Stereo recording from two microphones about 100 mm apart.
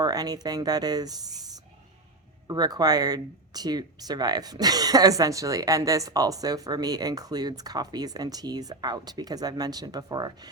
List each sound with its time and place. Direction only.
0.0 s speech: 40° right (ahead or behind)